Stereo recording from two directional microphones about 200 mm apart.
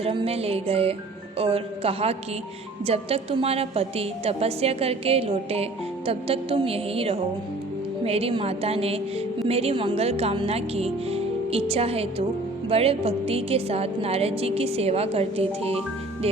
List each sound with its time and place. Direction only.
0.0 s speech: 25° right (ahead or behind)